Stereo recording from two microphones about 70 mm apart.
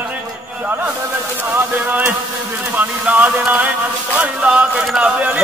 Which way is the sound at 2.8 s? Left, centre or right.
Right.